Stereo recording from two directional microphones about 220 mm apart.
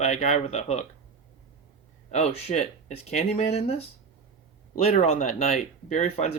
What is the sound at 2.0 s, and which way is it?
Speech, 30° left (ahead or behind).